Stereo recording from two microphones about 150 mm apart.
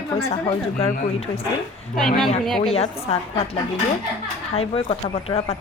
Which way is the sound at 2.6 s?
40° left (ahead or behind).